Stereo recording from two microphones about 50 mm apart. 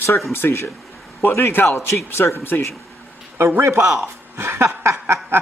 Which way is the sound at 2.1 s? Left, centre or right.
Left.